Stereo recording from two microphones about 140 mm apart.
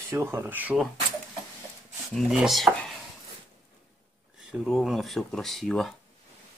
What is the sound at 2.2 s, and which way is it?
Speech, centre (ahead or behind).